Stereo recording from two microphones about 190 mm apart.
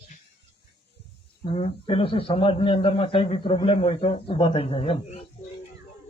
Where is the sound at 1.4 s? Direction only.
30° left (ahead or behind).